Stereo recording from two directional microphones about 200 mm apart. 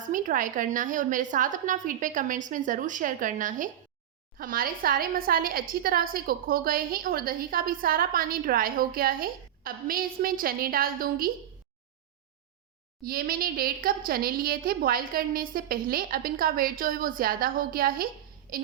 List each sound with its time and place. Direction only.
0.0 s a woman's voice: 40° right (ahead or behind)
13.1 s a woman's voice: 45° right (ahead or behind)